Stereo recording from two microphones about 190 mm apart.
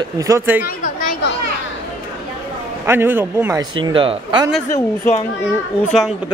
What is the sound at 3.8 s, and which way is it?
Speech, 25° right (ahead or behind).